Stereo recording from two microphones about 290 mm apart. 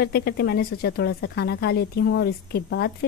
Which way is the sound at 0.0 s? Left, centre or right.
Left.